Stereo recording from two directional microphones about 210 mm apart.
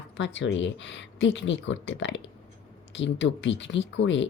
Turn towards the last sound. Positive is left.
turn(degrees=60)  # may be behind; listen again after turning